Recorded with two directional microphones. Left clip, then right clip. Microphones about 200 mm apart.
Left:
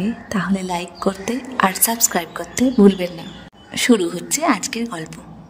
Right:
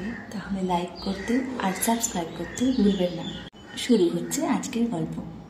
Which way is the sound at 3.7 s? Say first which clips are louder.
Left 5 dB; 50° left (ahead or behind).